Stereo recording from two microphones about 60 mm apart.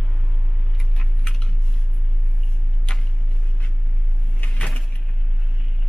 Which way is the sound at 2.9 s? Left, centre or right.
Centre.